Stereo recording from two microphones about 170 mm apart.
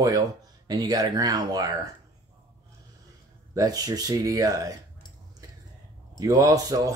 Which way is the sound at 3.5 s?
20° right (ahead or behind).